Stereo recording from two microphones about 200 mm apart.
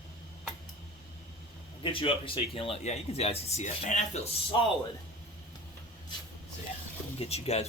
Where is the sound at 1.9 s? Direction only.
25° left (ahead or behind).